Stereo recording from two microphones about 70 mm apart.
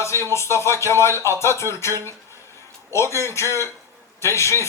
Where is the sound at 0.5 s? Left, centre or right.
Left.